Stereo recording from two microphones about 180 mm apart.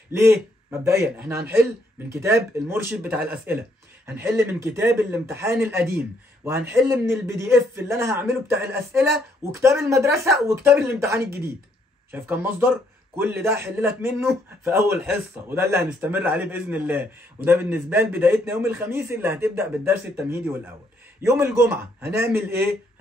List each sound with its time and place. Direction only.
0.1 s a man's voice: 15° right (ahead or behind)